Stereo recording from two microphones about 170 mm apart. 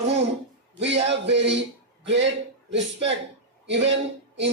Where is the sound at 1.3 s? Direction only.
90° right.